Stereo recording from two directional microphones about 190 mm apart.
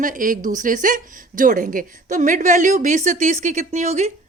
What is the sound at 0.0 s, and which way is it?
A woman's voice, 45° right (ahead or behind).